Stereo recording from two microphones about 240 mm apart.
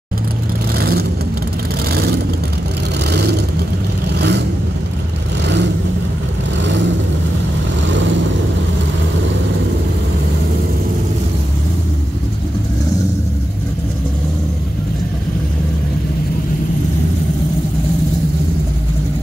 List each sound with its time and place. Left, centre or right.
0.7 s vehicle: right